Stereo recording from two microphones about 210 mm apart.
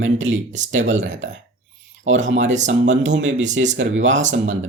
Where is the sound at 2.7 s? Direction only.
60° right (ahead or behind).